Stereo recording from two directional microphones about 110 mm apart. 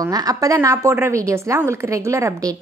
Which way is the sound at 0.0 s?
35° right (ahead or behind).